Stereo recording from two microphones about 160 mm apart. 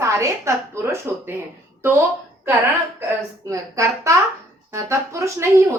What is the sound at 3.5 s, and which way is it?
Speech, 20° right (ahead or behind).